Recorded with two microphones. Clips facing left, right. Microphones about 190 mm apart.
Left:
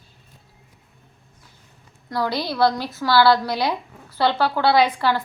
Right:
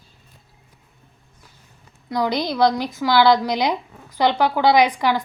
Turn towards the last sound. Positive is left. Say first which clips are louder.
# right 1 dB
turn(degrees=-15)  # may be behind; listen again after turning